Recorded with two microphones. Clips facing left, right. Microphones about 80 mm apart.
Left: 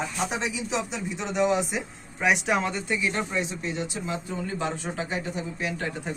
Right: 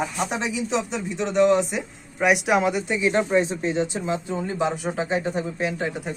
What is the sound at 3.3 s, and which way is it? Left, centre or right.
Speech, right.